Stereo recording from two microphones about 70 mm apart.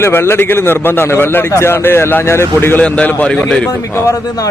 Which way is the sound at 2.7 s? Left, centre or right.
Centre.